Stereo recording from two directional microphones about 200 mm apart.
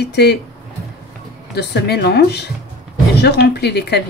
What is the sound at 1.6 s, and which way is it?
Speech, 55° left (ahead or behind).